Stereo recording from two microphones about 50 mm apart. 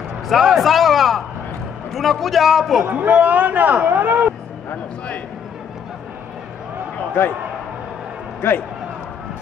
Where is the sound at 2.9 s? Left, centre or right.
Right.